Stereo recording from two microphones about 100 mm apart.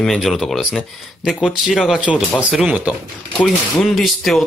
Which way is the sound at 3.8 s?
Centre (ahead or behind).